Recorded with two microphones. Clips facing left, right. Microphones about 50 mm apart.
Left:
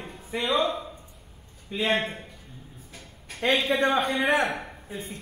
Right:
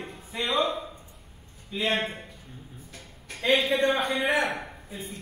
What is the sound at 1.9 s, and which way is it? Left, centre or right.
Speech, centre.